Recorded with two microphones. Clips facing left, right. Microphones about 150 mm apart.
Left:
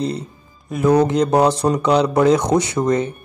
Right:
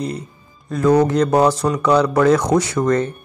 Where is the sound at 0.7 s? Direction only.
15° left (ahead or behind).